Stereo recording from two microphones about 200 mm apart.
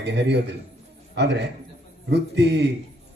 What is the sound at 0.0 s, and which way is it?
A man's voice, 55° right (ahead or behind).